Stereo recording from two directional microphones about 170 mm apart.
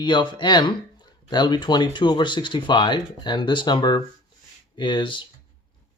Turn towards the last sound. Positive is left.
turn(degrees=30)  # may be behind; listen again after turning